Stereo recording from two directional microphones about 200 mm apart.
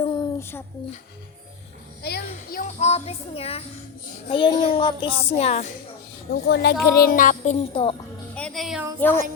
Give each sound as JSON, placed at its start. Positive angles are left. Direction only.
{"t": 2.0, "sound": "a child's voice", "side_deg": 50}
{"t": 6.3, "sound": "speech", "side_deg": 55}
{"t": 6.8, "sound": "music", "side_deg": 50}
{"t": 7.7, "sound": "speech", "side_deg": 25}
{"t": 8.4, "sound": "music", "side_deg": 5}
{"t": 9.0, "sound": "speech", "side_deg": 10}